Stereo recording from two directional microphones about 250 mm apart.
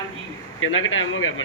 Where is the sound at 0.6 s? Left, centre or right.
Left.